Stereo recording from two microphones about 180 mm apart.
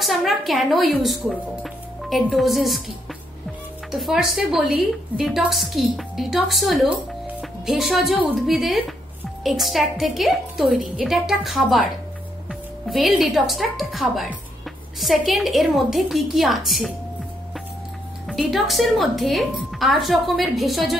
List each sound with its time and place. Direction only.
0.0 s a woman's voice: centre (ahead or behind)
3.9 s a woman's voice: centre (ahead or behind)
18.2 s a woman's voice: centre (ahead or behind)